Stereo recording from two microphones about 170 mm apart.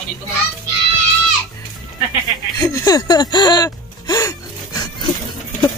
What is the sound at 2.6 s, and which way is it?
Speech, 20° left (ahead or behind).